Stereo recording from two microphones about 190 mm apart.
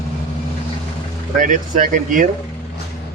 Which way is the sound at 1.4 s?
45° right (ahead or behind).